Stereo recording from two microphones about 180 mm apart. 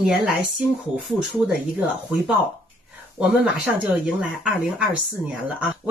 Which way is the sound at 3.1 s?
5° right (ahead or behind).